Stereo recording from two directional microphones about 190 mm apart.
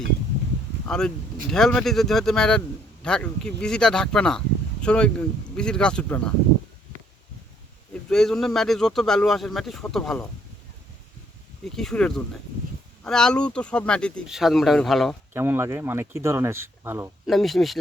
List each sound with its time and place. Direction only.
0.9 s speech: 5° left (ahead or behind)
8.1 s speech: centre (ahead or behind)
11.6 s speech: centre (ahead or behind)
15.3 s speech: 10° right (ahead or behind)
17.2 s speech: centre (ahead or behind)